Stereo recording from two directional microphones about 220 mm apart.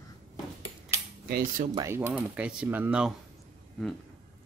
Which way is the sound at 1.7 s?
15° right (ahead or behind).